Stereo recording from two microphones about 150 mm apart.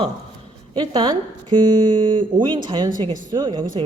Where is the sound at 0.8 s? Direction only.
25° right (ahead or behind).